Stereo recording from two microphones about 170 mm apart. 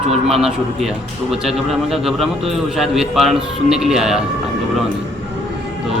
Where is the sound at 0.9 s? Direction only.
Centre (ahead or behind).